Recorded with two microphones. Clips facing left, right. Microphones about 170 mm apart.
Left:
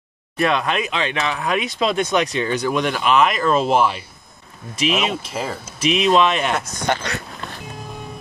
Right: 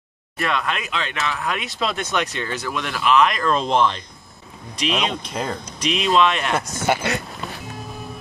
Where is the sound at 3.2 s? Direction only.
5° left (ahead or behind).